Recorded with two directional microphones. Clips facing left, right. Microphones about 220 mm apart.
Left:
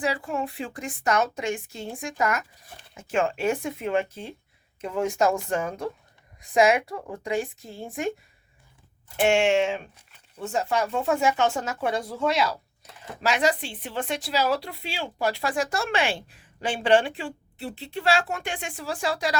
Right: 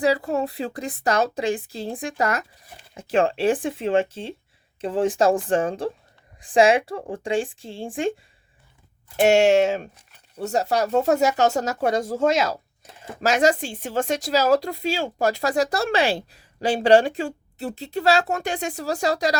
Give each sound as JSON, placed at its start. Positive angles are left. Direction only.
{"t": 0.0, "sound": "a woman's voice", "side_deg": -40}
{"t": 9.2, "sound": "speech", "side_deg": -40}